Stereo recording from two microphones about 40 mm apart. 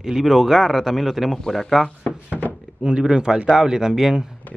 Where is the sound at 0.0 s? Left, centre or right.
Centre.